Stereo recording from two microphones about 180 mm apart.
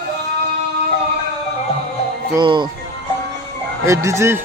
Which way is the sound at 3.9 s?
15° right (ahead or behind).